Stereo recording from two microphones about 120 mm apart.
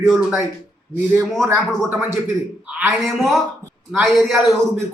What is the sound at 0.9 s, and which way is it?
Speech, 15° right (ahead or behind).